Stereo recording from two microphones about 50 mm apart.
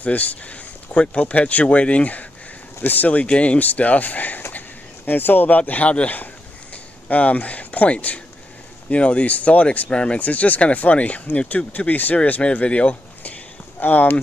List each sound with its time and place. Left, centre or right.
0.0 s speech: left
4.5 s a sound: left
5.7 s speech: left